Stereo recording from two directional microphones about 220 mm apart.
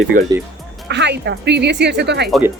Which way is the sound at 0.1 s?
35° right (ahead or behind).